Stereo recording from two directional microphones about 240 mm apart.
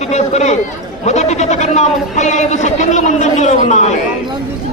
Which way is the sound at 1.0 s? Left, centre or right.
Left.